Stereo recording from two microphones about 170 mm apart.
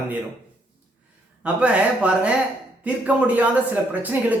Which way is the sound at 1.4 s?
5° right (ahead or behind).